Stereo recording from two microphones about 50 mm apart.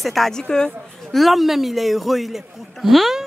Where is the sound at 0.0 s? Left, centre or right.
Centre.